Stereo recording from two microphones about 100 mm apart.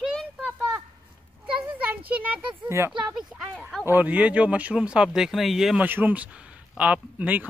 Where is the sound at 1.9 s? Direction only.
15° right (ahead or behind).